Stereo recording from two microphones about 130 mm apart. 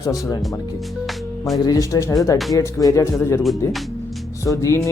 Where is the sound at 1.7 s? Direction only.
25° left (ahead or behind).